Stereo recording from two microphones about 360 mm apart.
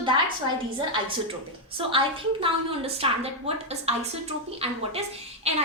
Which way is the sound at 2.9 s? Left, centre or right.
Centre.